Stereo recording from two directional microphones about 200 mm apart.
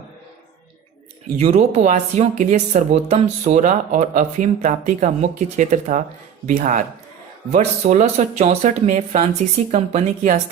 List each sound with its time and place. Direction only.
1.4 s speech: 30° right (ahead or behind)